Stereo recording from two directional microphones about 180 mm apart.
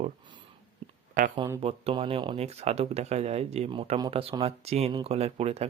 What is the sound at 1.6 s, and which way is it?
Speech, 35° right (ahead or behind).